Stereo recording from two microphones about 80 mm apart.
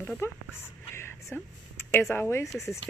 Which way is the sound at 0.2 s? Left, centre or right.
Left.